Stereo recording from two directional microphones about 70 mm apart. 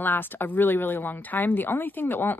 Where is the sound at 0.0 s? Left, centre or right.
Left.